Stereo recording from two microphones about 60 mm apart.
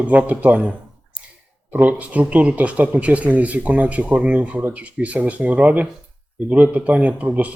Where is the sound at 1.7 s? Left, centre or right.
Right.